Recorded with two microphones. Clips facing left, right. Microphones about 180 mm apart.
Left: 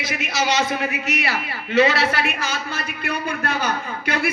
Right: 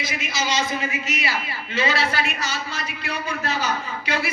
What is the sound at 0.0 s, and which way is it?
A man's voice, 60° left (ahead or behind).